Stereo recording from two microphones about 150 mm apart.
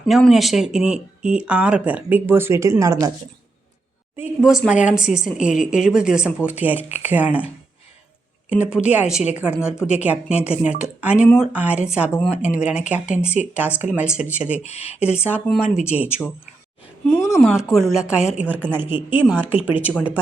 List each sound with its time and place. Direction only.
0.0 s speech: centre (ahead or behind); by 3.1 s 20° right (ahead or behind)
4.2 s speech: 5° right (ahead or behind)
14.6 s speech: 45° left (ahead or behind)
14.9 s speech: 10° right (ahead or behind)
17.3 s speech: 5° right (ahead or behind)